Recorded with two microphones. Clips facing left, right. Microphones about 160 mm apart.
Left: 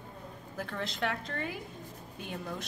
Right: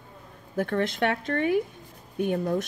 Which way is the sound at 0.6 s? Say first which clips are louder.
Right 10 dB; 65° right (ahead or behind).